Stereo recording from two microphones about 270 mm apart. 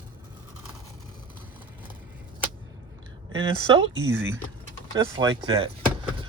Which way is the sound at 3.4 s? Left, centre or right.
Centre.